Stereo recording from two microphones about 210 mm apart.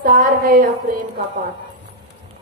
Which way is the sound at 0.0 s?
40° right (ahead or behind).